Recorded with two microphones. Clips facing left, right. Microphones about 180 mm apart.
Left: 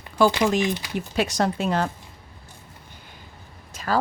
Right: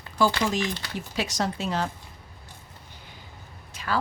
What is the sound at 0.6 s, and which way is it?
Speech, 15° left (ahead or behind).